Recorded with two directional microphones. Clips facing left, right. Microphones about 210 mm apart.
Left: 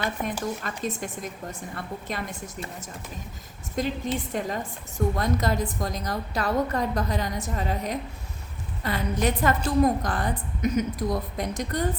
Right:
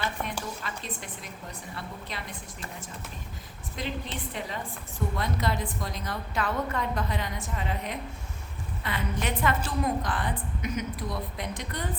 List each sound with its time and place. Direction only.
0.2 s a woman's voice: 50° left (ahead or behind)
3.8 s a woman's voice: 45° left (ahead or behind)